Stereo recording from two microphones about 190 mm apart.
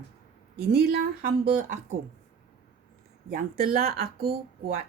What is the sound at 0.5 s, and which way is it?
Speech, 55° right (ahead or behind).